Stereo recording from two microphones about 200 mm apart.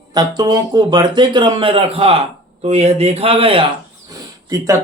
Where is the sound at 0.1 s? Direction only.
20° right (ahead or behind).